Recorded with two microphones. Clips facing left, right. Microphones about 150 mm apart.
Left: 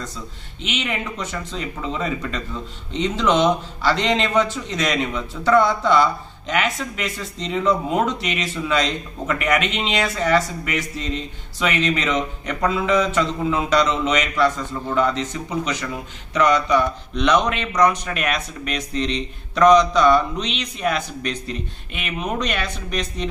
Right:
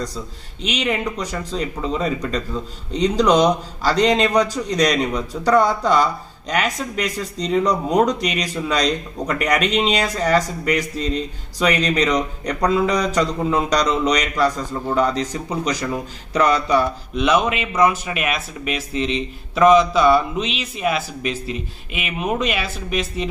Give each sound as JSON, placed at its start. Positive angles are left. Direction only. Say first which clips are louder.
{"t": 0.6, "sound": "a man's voice", "louder": "right 4 dB", "side_deg": -40}
{"t": 17.1, "sound": "speech", "louder": "right 1 dB", "side_deg": -5}